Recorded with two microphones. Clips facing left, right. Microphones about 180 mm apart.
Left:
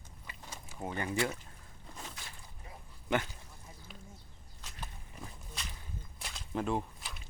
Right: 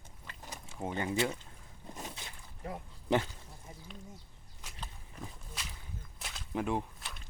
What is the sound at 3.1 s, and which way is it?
Speech, 35° right (ahead or behind).